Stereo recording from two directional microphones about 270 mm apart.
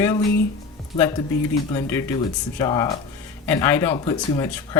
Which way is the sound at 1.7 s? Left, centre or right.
Centre.